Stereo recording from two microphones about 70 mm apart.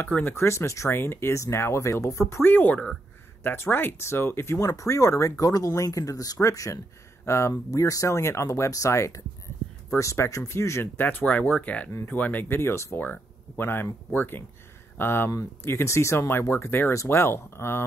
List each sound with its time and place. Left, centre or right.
0.1 s speech: left
2.4 s speech: left
4.6 s speech: left
11.0 s speech: left